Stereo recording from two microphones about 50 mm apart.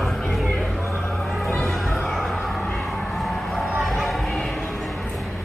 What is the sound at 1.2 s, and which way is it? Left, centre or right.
Music, centre.